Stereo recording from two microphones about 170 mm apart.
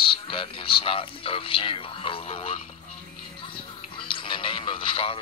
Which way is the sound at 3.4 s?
30° left (ahead or behind).